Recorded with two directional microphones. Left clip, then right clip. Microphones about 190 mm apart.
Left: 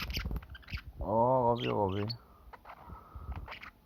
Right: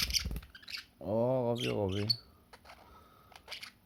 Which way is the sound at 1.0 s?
25° right (ahead or behind).